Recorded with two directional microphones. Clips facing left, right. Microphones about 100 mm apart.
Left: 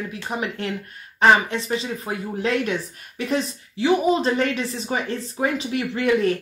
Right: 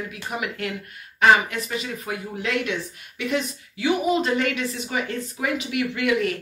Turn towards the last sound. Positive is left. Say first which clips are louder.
# left 3 dB
turn(degrees=35)  # may be behind; listen again after turning